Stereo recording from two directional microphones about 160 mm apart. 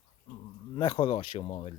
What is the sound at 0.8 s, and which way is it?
Speech, 30° left (ahead or behind).